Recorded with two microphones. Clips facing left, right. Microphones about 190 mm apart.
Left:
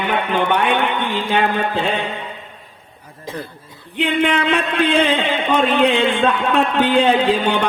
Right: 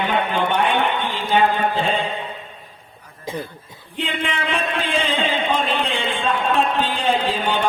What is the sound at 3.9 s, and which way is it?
Speech, 65° left (ahead or behind).